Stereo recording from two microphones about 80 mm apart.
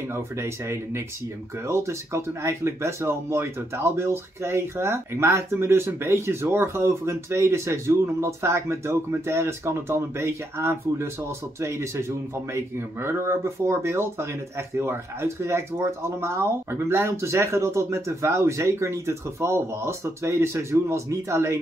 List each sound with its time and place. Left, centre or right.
0.1 s speech: right